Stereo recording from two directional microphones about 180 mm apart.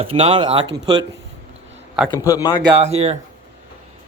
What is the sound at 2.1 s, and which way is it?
Speech, 20° left (ahead or behind).